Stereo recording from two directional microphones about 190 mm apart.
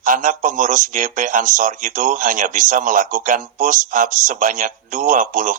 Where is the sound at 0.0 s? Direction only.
45° right (ahead or behind).